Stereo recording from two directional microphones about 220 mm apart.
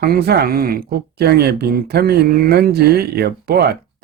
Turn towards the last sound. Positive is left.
turn(degrees=-45)  # may be behind; listen again after turning